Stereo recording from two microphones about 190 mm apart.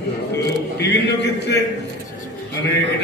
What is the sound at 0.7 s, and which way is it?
Speech, 65° left (ahead or behind).